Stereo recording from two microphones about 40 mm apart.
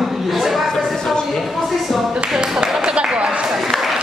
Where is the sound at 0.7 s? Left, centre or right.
Centre.